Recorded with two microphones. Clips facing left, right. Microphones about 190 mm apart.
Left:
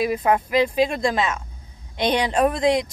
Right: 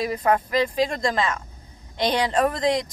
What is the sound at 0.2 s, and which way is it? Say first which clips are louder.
Speech: left 2 dB; 20° left (ahead or behind).